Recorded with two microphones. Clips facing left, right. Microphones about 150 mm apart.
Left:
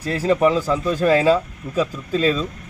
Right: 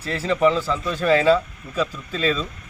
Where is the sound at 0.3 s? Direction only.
45° left (ahead or behind).